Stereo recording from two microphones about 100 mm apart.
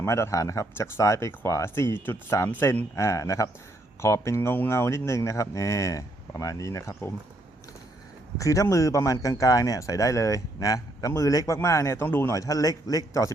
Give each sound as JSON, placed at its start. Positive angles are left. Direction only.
{"t": 0.0, "sound": "speech", "side_deg": 30}
{"t": 8.4, "sound": "speech", "side_deg": 35}
{"t": 12.3, "sound": "speech", "side_deg": 35}